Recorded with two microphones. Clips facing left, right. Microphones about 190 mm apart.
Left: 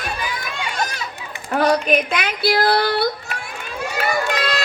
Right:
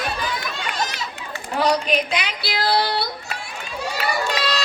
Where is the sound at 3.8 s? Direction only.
55° left (ahead or behind).